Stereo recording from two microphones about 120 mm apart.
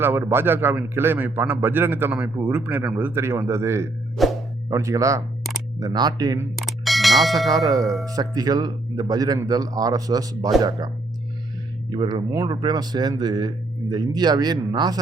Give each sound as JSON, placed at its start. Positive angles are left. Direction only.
{"t": 0.0, "sound": "a man's voice", "side_deg": -20}
{"t": 4.2, "sound": "music", "side_deg": 0}
{"t": 4.7, "sound": "speech", "side_deg": -25}
{"t": 6.6, "sound": "bicycle bell", "side_deg": 0}
{"t": 7.6, "sound": "speech", "side_deg": 0}
{"t": 8.0, "sound": "speech", "side_deg": -30}
{"t": 11.9, "sound": "speech", "side_deg": -40}